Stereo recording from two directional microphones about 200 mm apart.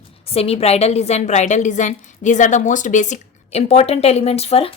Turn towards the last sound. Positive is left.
turn(degrees=30)  # may be behind; listen again after turning